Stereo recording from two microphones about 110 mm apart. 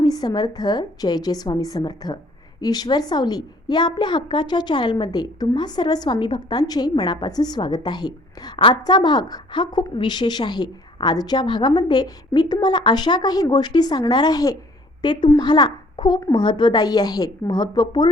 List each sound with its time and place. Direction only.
0.0 s a woman's voice: 40° left (ahead or behind)